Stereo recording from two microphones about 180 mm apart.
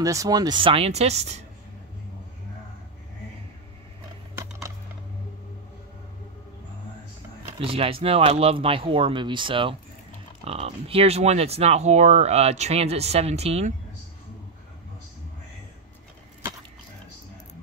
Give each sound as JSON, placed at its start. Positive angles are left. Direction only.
{"t": 0.0, "sound": "speech", "side_deg": -20}
{"t": 4.4, "sound": "a sound", "side_deg": -15}
{"t": 7.5, "sound": "speech", "side_deg": -30}